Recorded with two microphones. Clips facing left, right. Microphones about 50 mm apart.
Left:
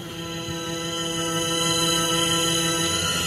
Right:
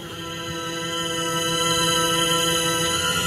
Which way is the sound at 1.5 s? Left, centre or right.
Right.